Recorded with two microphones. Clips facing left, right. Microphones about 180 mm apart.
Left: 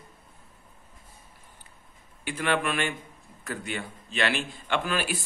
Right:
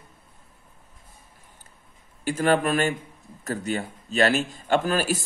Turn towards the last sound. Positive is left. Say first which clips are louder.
# right 6 dB
turn(degrees=-40)  # may be behind; listen again after turning